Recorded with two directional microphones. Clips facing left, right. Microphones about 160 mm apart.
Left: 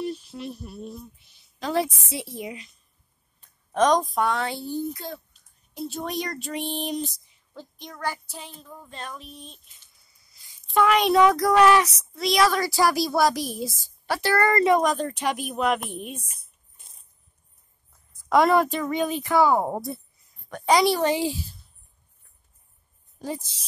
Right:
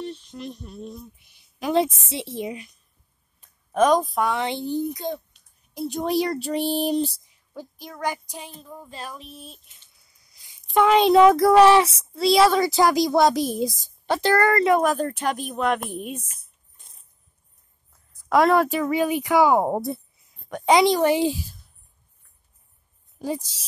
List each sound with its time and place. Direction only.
0.0 s speech: 10° left (ahead or behind)
1.6 s a child's voice: 20° right (ahead or behind)
3.3 s speech: 10° right (ahead or behind)
4.7 s speech: 15° right (ahead or behind)
6.0 s speech: 30° right (ahead or behind)
7.5 s speech: 10° right (ahead or behind)
8.5 s speech: centre (ahead or behind)
10.6 s a child's voice: 20° right (ahead or behind)
14.5 s speech: centre (ahead or behind)
16.2 s a sound: 5° left (ahead or behind)
18.3 s speech: centre (ahead or behind)
23.1 s a woman's voice: 10° right (ahead or behind)